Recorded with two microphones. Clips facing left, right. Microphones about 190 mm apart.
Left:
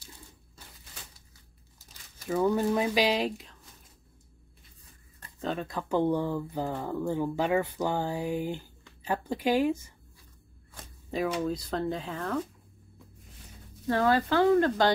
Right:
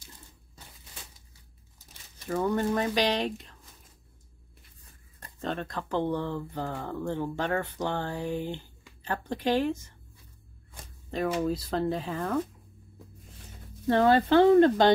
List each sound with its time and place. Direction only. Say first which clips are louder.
2.2 s speech: left 2 dB; 5° left (ahead or behind)
5.4 s speech: left 1 dB; 5° left (ahead or behind)
8.1 s speech: left 1 dB; 15° left (ahead or behind)
11.2 s speech: right 3 dB; 5° right (ahead or behind)
13.8 s speech: right 3 dB; 25° right (ahead or behind)